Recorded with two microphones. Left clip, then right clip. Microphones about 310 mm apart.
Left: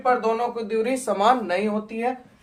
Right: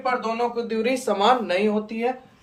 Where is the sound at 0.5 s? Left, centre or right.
Centre.